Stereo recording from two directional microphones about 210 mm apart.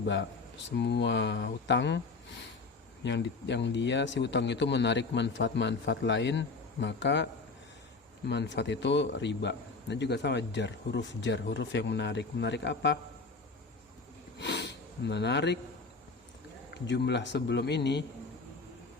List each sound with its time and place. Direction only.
0.0 s a man's voice: 55° left (ahead or behind)
3.0 s a man's voice: 55° left (ahead or behind)
8.3 s a man's voice: 55° left (ahead or behind)
14.3 s sniff: 55° left (ahead or behind)
16.7 s a man's voice: 55° left (ahead or behind)